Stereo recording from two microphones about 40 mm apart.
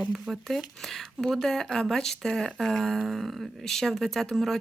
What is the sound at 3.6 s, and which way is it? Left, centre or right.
Speech, centre.